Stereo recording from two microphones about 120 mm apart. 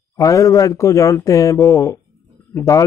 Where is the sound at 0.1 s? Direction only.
25° left (ahead or behind).